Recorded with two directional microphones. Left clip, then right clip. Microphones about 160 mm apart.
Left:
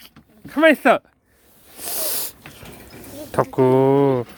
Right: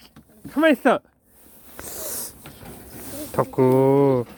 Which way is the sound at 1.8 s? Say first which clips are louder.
Left 7 dB; 30° left (ahead or behind).